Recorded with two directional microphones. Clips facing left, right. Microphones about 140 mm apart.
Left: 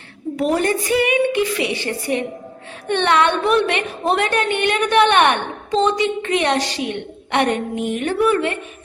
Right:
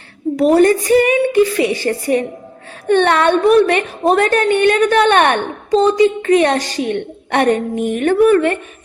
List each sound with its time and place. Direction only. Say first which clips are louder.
0.3 s a woman's voice: right 8 dB; 40° right (ahead or behind)